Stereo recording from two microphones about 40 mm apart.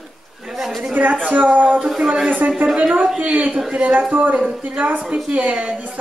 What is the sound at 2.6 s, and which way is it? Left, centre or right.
Speech, right.